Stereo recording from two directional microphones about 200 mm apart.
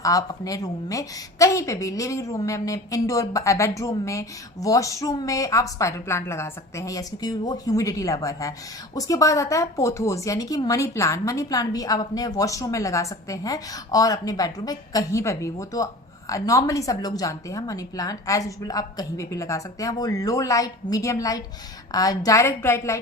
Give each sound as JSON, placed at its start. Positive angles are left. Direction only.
{"t": 0.0, "sound": "a woman's voice", "side_deg": 15}